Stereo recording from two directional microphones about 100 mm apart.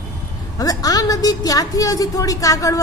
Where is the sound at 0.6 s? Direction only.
35° left (ahead or behind).